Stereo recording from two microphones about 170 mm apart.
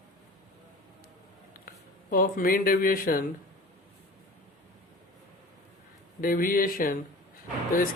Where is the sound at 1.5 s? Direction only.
55° left (ahead or behind).